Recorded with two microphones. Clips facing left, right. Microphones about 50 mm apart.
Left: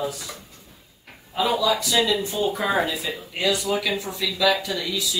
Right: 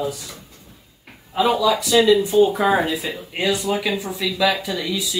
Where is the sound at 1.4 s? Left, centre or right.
Centre.